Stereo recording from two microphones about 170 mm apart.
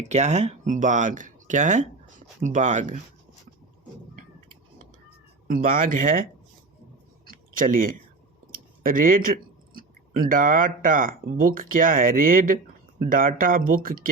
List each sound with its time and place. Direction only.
0.0 s speech: 40° right (ahead or behind)
5.5 s speech: 55° right (ahead or behind)
7.5 s speech: 55° right (ahead or behind)
8.5 s a sound: 55° right (ahead or behind)
9.7 s speech: 55° right (ahead or behind)